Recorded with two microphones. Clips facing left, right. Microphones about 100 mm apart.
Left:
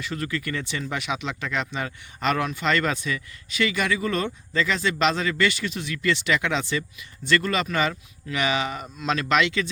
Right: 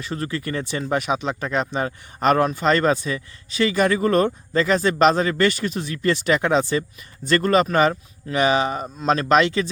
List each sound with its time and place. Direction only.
0.0 s speech: 35° right (ahead or behind)